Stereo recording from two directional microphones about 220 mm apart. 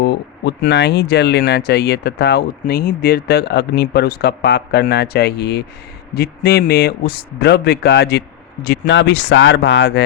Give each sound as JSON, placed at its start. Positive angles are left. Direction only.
{"t": 0.0, "sound": "speech", "side_deg": 50}